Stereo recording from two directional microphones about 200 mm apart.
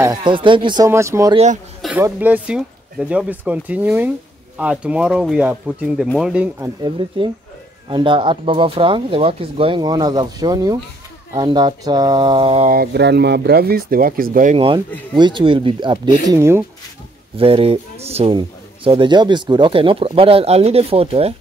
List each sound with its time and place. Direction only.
0.0 s speech: 20° right (ahead or behind)
1.3 s speech: 35° right (ahead or behind)
1.8 s a sound: 5° right (ahead or behind)
2.0 s speech: 10° right (ahead or behind)
7.2 s speech: 25° right (ahead or behind)
12.6 s speech: 50° right (ahead or behind)
15.1 s speech: 25° right (ahead or behind)
16.3 s speech: 15° right (ahead or behind)
17.4 s speech: 30° right (ahead or behind)